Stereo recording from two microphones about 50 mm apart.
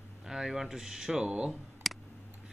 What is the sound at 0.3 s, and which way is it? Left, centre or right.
Speech, centre.